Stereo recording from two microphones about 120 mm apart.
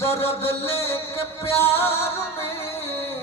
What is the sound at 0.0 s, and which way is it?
Music, 20° left (ahead or behind).